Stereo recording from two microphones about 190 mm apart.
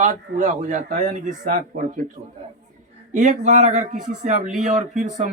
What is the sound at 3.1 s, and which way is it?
A man's voice, 40° right (ahead or behind).